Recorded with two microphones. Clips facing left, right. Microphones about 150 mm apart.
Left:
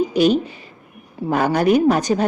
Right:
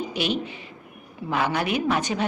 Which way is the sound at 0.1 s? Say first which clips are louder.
Left 10 dB; 40° left (ahead or behind).